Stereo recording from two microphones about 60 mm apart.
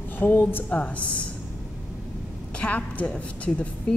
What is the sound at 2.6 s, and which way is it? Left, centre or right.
A woman's voice, left.